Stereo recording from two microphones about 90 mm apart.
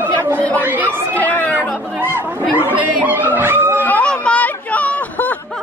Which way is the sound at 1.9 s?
20° right (ahead or behind).